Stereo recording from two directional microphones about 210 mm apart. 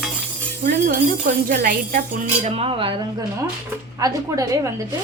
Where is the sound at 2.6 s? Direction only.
25° right (ahead or behind).